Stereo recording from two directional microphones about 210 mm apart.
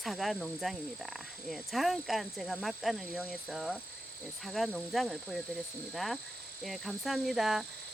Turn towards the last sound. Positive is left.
turn(degrees=0)  # may be behind; listen again after turning